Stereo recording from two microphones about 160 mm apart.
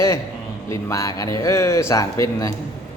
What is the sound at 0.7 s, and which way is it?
Speech, 20° left (ahead or behind).